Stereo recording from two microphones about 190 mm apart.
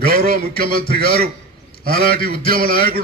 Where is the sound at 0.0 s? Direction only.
50° right (ahead or behind).